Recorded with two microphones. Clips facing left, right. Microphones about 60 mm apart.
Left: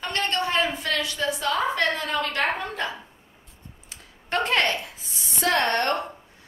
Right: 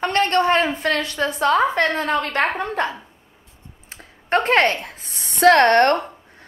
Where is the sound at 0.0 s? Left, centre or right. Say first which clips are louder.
Right 8 dB; right.